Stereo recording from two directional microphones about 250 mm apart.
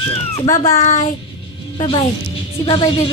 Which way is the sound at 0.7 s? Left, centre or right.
Left.